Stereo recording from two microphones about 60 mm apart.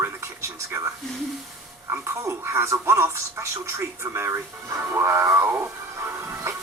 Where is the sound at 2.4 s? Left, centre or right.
Right.